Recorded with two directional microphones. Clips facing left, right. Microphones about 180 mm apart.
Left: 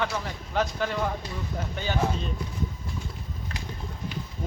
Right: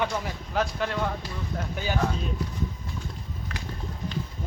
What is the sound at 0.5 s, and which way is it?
Speech, centre (ahead or behind).